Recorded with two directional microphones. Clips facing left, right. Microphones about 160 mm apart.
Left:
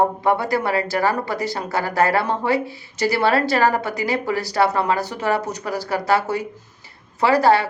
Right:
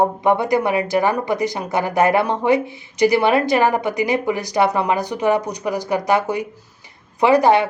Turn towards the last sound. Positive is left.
turn(degrees=-20)  # may be behind; listen again after turning